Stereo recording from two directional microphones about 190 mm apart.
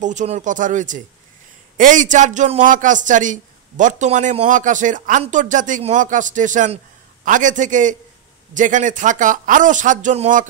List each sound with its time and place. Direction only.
0.0 s a man's voice: 40° right (ahead or behind)